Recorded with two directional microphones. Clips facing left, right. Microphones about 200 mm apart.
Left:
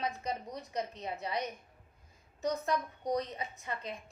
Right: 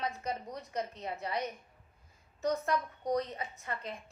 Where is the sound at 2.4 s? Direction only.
15° left (ahead or behind).